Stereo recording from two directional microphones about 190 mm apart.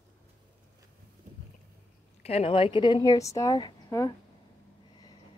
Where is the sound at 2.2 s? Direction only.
30° left (ahead or behind).